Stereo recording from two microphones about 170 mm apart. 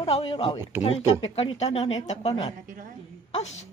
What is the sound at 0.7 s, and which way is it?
Speech, 10° right (ahead or behind).